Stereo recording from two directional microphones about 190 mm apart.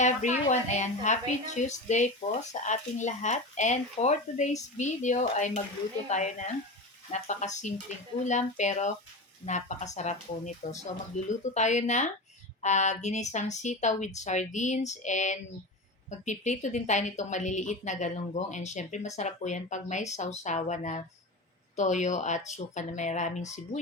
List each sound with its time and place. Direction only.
0.0 s a woman's voice: 40° left (ahead or behind)